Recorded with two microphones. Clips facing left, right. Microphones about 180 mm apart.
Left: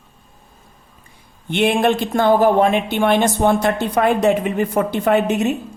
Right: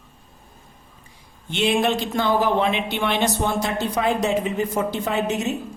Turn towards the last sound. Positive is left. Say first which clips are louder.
# left 7 dB
turn(degrees=60)  # may be behind; listen again after turning